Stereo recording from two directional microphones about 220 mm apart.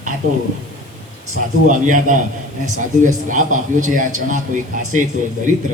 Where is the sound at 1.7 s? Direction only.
35° right (ahead or behind).